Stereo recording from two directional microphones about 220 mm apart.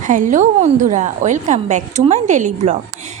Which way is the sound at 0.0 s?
35° right (ahead or behind).